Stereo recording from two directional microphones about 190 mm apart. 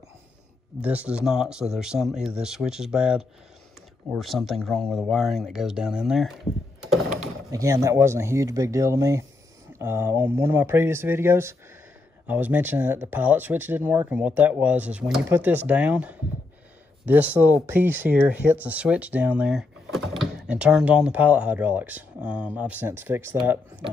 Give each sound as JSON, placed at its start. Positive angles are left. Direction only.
{"t": 0.7, "sound": "speech", "side_deg": -5}
{"t": 7.5, "sound": "speech", "side_deg": -15}